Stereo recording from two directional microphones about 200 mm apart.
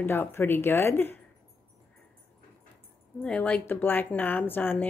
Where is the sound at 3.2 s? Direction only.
5° left (ahead or behind).